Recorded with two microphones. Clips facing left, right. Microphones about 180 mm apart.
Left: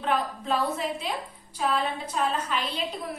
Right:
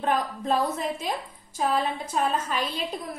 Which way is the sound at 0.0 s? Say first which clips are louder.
Right 1 dB; 45° right (ahead or behind).